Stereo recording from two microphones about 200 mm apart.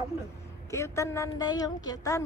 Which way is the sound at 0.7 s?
15° left (ahead or behind).